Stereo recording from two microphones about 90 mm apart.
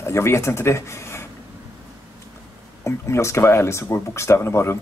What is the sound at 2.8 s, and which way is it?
A woman's voice, 30° left (ahead or behind).